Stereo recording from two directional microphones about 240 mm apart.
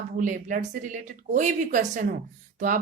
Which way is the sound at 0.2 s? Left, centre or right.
Right.